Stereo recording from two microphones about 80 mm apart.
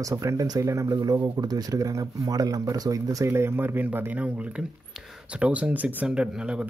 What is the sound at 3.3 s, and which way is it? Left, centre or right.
A man's voice, right.